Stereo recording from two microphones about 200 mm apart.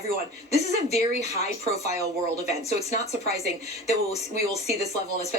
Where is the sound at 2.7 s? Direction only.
30° left (ahead or behind).